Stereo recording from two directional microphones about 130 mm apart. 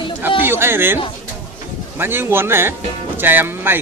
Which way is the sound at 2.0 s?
15° right (ahead or behind).